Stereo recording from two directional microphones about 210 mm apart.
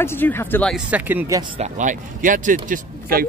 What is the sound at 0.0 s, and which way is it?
Speech, 10° left (ahead or behind).